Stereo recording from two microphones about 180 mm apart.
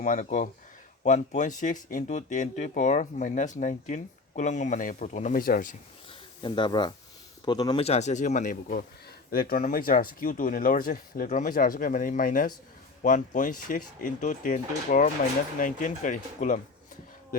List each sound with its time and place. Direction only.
0.0 s speech: 40° left (ahead or behind)
6.1 s a sound: 25° left (ahead or behind)
7.4 s a man's voice: 25° left (ahead or behind)
7.9 s speech: 40° left (ahead or behind)
9.3 s speech: 55° left (ahead or behind)